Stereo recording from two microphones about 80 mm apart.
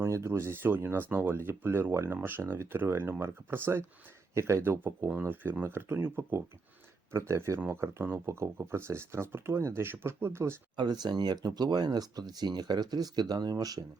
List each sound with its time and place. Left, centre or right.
0.0 s speech: right
10.8 s speech: right